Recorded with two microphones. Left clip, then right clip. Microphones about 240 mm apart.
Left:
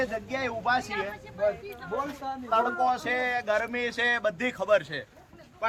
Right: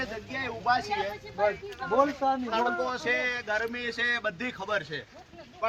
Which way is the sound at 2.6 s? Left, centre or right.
Left.